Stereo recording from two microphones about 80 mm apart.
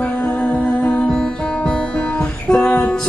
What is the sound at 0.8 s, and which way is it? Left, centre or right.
Music, centre.